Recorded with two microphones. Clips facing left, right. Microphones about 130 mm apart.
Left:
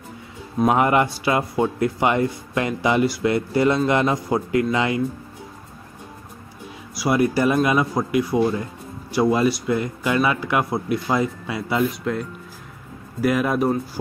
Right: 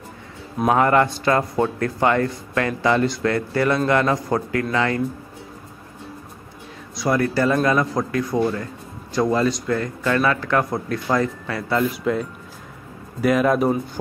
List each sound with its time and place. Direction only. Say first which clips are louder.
0.7 s speech: right 1 dB; 15° left (ahead or behind)
7.0 s speech: left 1 dB; 15° left (ahead or behind)
11.9 s speech: right 3 dB; centre (ahead or behind)